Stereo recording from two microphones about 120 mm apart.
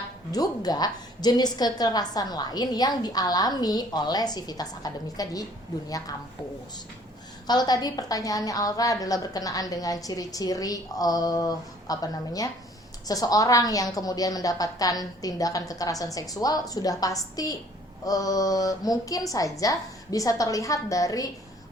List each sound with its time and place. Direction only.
0.3 s a woman's voice: 30° left (ahead or behind)
7.4 s a woman's voice: 35° left (ahead or behind)